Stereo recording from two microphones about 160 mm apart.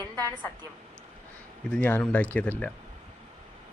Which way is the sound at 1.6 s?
10° left (ahead or behind).